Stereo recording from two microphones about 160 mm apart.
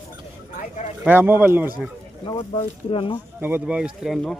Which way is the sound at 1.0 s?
10° right (ahead or behind).